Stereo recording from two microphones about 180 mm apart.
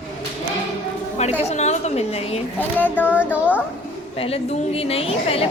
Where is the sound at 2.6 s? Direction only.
10° left (ahead or behind).